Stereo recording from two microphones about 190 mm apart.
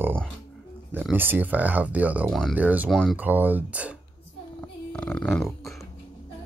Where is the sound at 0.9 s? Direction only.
10° right (ahead or behind).